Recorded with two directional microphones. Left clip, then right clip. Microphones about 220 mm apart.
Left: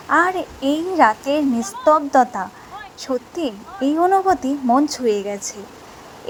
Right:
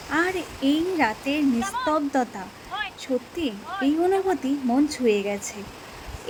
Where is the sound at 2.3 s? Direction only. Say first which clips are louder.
Left 6 dB; centre (ahead or behind).